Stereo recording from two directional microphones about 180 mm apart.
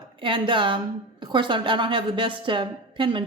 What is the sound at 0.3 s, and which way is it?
A woman's voice, 25° right (ahead or behind).